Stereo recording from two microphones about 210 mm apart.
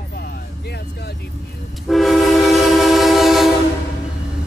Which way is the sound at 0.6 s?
50° left (ahead or behind).